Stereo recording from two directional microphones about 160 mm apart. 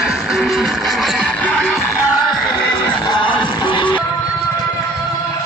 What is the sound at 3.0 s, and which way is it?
Music, 30° left (ahead or behind).